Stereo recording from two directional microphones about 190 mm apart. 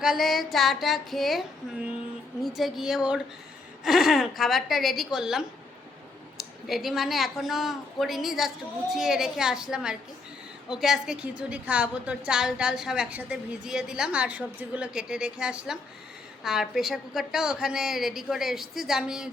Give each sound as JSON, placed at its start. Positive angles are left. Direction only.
{"t": 0.0, "sound": "a woman's voice", "side_deg": 0}